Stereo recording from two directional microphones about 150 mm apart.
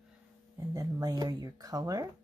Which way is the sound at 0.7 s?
20° right (ahead or behind).